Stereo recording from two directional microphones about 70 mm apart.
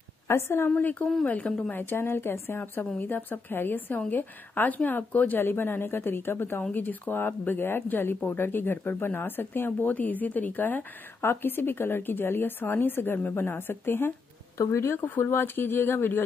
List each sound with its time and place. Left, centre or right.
0.3 s speech: left
0.7 s a woman's voice: left
15.0 s speech: left